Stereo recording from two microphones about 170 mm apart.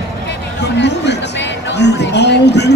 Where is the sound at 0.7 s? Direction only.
90° left.